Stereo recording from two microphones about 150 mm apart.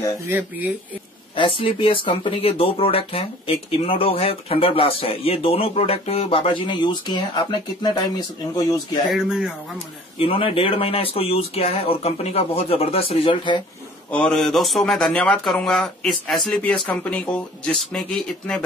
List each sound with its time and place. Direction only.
0.3 s speech: 15° right (ahead or behind)
1.6 s speech: 35° left (ahead or behind)
9.1 s speech: 5° right (ahead or behind)
10.1 s speech: 40° left (ahead or behind)
14.1 s speech: 5° left (ahead or behind)